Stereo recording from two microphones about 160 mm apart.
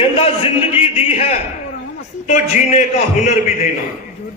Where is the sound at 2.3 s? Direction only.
50° left (ahead or behind).